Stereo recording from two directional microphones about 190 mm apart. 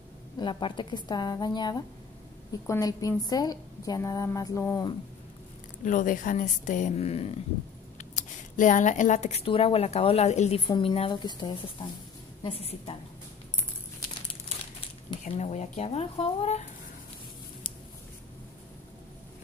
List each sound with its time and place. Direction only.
0.4 s a woman's voice: 25° left (ahead or behind)
5.9 s speech: 45° left (ahead or behind)
15.2 s speech: 35° left (ahead or behind)